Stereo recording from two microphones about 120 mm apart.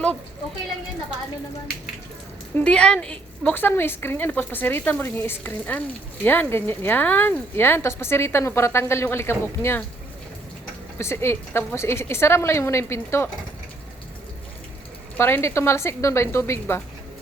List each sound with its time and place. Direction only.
2.6 s a woman's voice: 10° left (ahead or behind)
10.9 s speech: 20° left (ahead or behind)
15.2 s speech: 20° left (ahead or behind)